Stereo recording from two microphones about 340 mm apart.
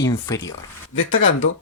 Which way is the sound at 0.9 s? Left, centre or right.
Left.